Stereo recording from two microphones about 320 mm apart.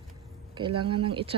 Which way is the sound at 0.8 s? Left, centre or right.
Centre.